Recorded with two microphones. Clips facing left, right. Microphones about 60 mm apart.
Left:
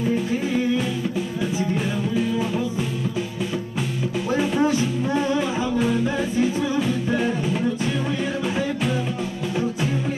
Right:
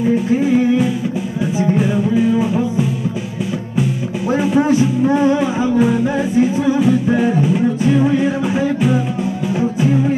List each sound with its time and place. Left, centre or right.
0.3 s music: right
4.7 s music: centre